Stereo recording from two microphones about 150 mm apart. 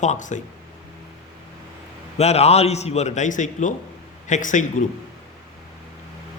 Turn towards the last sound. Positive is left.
turn(degrees=60)  # may be behind; listen again after turning